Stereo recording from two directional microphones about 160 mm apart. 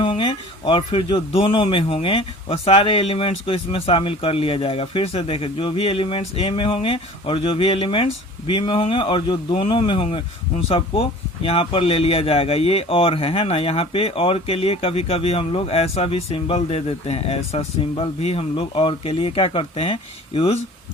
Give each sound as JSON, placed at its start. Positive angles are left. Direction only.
{"t": 0.0, "sound": "speech", "side_deg": 30}